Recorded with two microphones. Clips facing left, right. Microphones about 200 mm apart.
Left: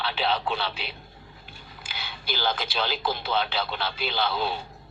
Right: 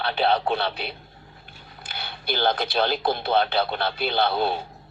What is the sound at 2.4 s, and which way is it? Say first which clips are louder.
Speech: right 6 dB; 60° right (ahead or behind).